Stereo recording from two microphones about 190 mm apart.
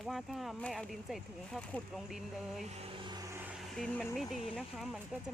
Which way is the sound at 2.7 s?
30° right (ahead or behind).